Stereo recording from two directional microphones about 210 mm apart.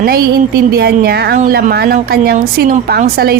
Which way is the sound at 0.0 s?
45° right (ahead or behind).